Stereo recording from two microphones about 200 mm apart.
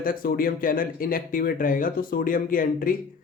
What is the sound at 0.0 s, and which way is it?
Speech, 45° left (ahead or behind).